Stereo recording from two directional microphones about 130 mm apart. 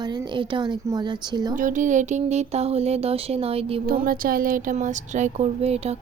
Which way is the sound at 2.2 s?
60° right (ahead or behind).